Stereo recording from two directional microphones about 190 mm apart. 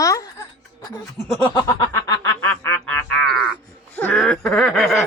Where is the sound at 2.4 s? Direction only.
10° left (ahead or behind).